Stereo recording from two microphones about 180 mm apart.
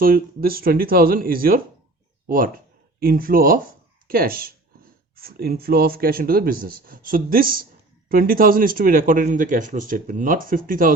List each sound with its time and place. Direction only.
0.0 s a man's voice: 55° right (ahead or behind)